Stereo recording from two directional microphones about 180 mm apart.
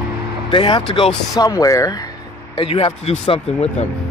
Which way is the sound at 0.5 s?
25° left (ahead or behind).